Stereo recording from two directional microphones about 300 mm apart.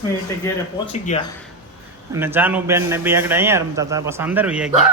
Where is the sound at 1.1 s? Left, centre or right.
Left.